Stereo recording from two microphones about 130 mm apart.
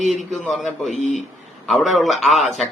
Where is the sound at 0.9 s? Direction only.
70° left (ahead or behind).